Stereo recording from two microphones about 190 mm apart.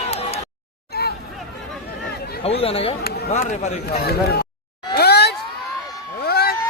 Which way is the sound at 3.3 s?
40° left (ahead or behind).